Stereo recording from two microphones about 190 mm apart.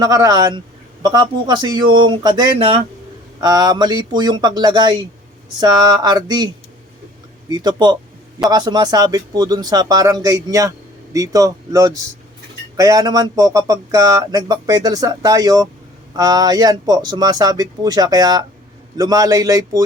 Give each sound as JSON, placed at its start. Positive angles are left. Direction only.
{"t": 0.0, "sound": "speech", "side_deg": -20}
{"t": 7.5, "sound": "speech", "side_deg": -20}